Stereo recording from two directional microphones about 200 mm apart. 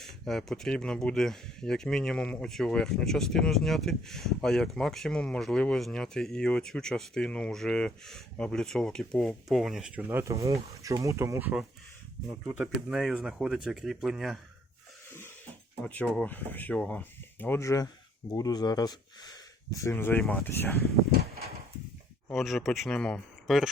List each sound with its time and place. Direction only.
0.0 s speech: centre (ahead or behind)
12.9 s speech: centre (ahead or behind)
16.0 s speech: 5° left (ahead or behind)
21.1 s a sound: 50° right (ahead or behind)
22.3 s speech: centre (ahead or behind)